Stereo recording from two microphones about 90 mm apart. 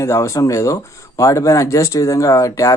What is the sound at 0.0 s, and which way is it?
Speech, 35° left (ahead or behind).